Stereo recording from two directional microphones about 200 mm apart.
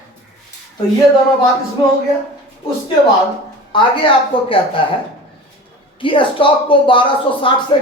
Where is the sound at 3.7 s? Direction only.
25° left (ahead or behind).